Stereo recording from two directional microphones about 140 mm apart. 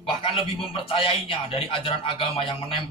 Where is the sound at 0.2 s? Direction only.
40° left (ahead or behind).